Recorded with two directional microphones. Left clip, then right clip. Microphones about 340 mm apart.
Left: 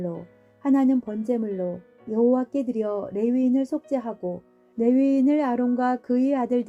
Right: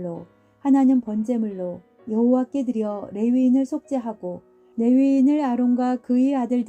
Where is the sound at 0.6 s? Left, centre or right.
Right.